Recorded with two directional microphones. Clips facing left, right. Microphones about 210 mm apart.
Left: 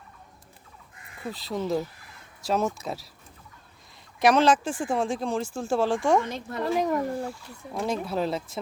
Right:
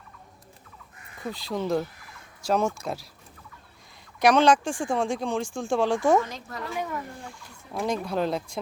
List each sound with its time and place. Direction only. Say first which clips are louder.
1.3 s speech: right 1 dB; centre (ahead or behind)
4.2 s speech: right 1 dB; 5° left (ahead or behind)
6.5 s speech: left 11 dB; 35° left (ahead or behind)
7.8 s speech: right 1 dB; 5° left (ahead or behind)